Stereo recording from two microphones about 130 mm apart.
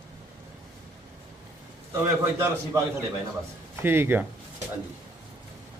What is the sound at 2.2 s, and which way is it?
Speech, 20° right (ahead or behind).